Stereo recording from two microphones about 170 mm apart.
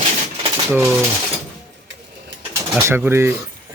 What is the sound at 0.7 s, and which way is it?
Speech, 10° right (ahead or behind).